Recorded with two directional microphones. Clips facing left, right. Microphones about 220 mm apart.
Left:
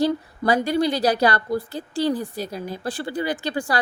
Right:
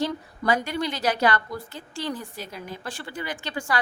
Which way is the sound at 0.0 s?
35° left (ahead or behind).